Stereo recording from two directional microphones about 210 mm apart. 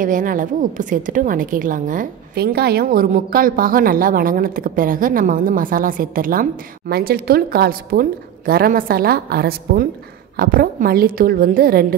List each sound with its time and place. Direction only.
0.0 s a woman's voice: 40° right (ahead or behind)